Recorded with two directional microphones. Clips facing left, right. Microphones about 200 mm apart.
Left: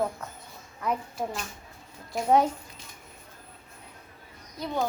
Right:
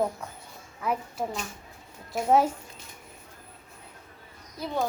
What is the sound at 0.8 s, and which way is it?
Speech, 5° right (ahead or behind).